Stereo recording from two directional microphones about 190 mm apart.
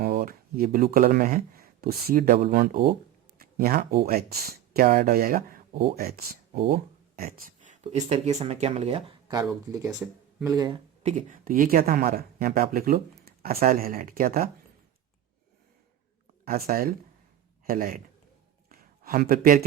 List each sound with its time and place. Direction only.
0.0 s speech: 55° right (ahead or behind)
7.2 s a sound: 50° right (ahead or behind)
8.1 s speech: 35° right (ahead or behind)
9.2 s speech: 20° right (ahead or behind)
11.0 s speech: 45° right (ahead or behind)
16.5 s speech: 50° right (ahead or behind)
18.7 s a sound: 50° right (ahead or behind)